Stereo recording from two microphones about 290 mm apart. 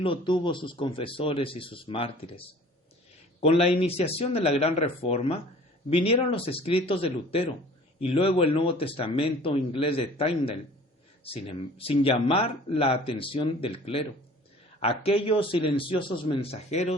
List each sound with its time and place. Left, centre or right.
0.0 s speech: centre
3.4 s speech: left